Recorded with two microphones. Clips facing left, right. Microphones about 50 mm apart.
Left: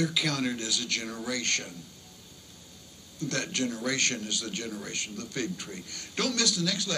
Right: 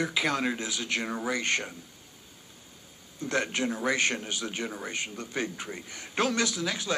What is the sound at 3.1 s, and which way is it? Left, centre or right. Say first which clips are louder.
A man's voice: right 2 dB; centre.